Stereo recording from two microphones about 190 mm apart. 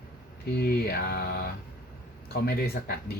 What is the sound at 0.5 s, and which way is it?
Speech, 55° left (ahead or behind).